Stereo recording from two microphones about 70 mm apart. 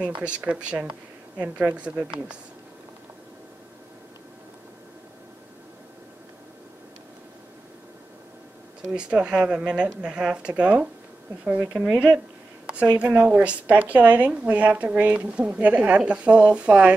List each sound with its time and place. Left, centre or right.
0.2 s speech: centre
8.9 s speech: centre